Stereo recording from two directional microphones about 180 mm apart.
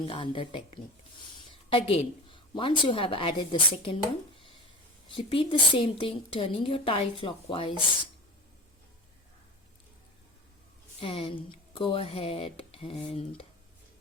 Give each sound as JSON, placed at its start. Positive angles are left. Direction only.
{"t": 0.0, "sound": "a woman's voice", "side_deg": 30}
{"t": 5.0, "sound": "a woman's voice", "side_deg": 30}
{"t": 11.0, "sound": "speech", "side_deg": 30}